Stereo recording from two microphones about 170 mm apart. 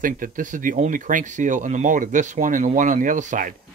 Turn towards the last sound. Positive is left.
turn(degrees=-50)  # may be behind; listen again after turning